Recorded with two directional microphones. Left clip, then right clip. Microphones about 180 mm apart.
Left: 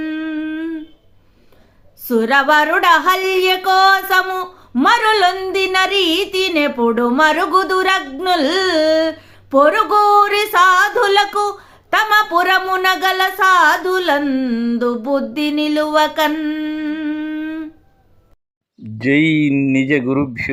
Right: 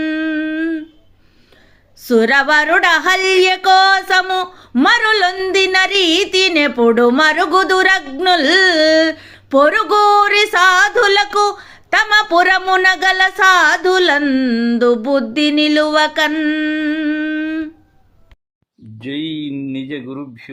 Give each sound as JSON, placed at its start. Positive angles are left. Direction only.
{"t": 0.0, "sound": "humming", "side_deg": 0}
{"t": 2.0, "sound": "speech", "side_deg": -10}
{"t": 18.9, "sound": "speech", "side_deg": 25}
{"t": 19.5, "sound": "speech", "side_deg": 10}
{"t": 19.7, "sound": "speech", "side_deg": 30}